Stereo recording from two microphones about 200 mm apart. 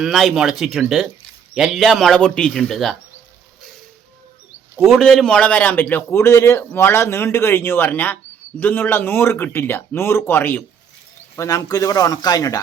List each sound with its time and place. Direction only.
0.0 s speech: centre (ahead or behind)
4.8 s a man's voice: centre (ahead or behind); by 12.5 s 20° left (ahead or behind)